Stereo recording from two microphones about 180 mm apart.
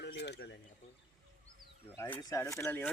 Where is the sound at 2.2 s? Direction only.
20° left (ahead or behind).